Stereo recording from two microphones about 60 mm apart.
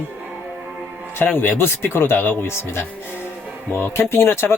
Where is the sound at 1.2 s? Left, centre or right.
Left.